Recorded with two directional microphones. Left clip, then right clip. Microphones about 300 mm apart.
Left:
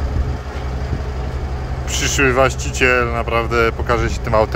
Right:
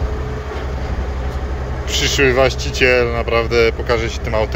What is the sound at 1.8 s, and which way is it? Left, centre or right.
Speech, centre.